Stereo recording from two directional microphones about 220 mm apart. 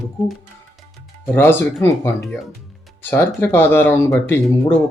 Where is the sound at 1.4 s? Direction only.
10° left (ahead or behind).